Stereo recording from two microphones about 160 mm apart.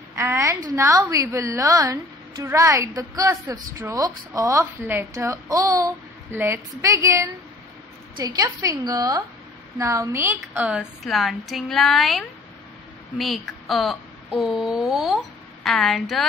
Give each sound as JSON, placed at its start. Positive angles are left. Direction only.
{"t": 0.1, "sound": "a woman's voice", "side_deg": -20}